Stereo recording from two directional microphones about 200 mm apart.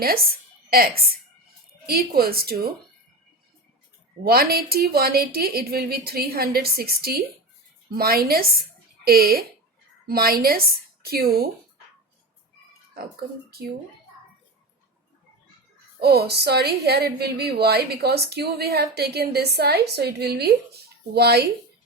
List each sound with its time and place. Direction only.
0.7 s a woman's voice: 50° right (ahead or behind)
4.2 s a woman's voice: 50° right (ahead or behind)
16.0 s a woman's voice: 50° right (ahead or behind)